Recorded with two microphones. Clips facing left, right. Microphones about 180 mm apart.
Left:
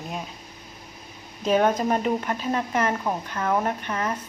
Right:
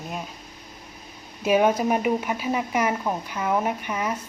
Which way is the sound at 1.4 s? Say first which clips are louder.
Right 1 dB; 10° right (ahead or behind).